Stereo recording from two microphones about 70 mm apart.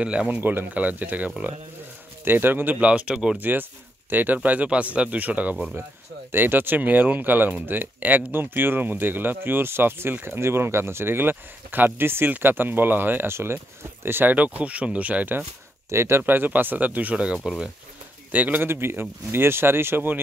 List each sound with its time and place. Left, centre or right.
0.0 s speech: centre
0.4 s speech: right
3.3 s speech: right
14.3 s speech: right
15.9 s speech: right; by 17.4 s centre
17.4 s speech: centre
18.3 s speech: right